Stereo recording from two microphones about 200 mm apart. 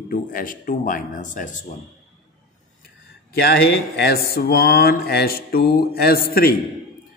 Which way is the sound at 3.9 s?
55° left (ahead or behind).